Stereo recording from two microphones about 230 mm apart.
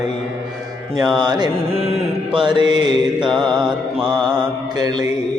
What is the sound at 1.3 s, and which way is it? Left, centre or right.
Mantra, centre.